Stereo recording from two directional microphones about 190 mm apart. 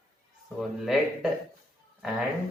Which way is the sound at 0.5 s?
Centre (ahead or behind).